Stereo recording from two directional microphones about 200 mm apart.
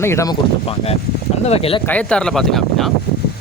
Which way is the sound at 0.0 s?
10° left (ahead or behind).